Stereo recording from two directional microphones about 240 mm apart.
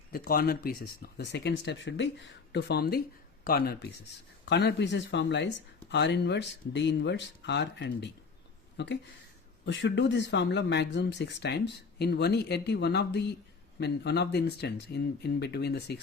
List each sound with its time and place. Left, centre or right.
0.1 s speech: left